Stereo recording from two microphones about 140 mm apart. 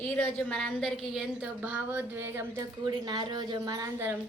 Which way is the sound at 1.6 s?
10° right (ahead or behind).